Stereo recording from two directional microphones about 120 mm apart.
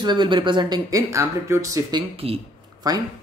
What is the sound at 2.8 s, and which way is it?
Speech, 30° right (ahead or behind).